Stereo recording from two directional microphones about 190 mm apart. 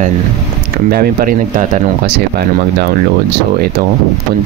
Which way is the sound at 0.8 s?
50° right (ahead or behind).